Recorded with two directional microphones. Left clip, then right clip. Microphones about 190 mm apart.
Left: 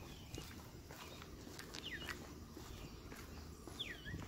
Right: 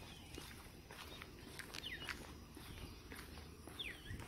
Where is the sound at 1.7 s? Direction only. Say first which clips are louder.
Even; 15° right (ahead or behind).